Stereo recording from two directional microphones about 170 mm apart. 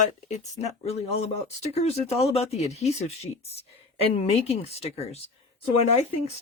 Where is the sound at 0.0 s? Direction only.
40° left (ahead or behind).